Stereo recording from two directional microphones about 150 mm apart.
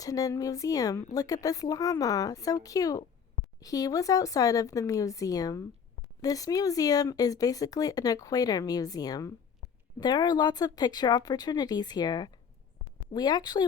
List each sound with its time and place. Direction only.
0.0 s speech: 25° left (ahead or behind)